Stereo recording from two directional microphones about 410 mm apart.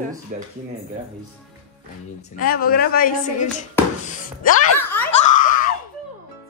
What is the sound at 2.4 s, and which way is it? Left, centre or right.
A woman's voice, left.